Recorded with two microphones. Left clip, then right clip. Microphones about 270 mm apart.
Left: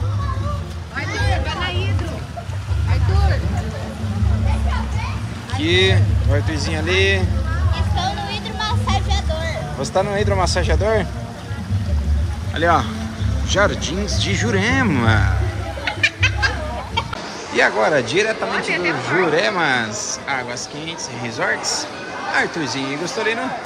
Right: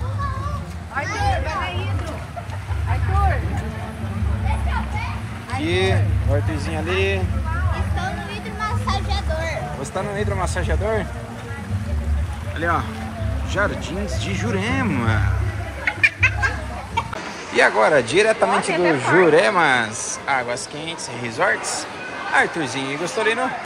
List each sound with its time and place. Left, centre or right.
5.6 s speech: centre
8.5 s music: left
9.1 s speech: centre
12.5 s speech: centre
16.3 s chicken: left
17.6 s speech: centre
18.7 s speech: centre
19.3 s speech: centre